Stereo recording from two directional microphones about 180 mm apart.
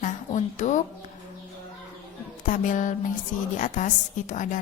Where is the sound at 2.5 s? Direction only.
45° left (ahead or behind).